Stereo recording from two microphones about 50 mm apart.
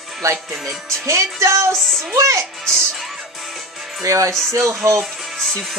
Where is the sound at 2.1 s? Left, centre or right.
Right.